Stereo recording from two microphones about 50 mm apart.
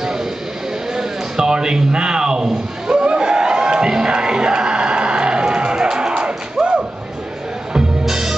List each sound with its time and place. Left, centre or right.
0.0 s vehicle: centre
0.9 s a sound: centre
8.0 s music: centre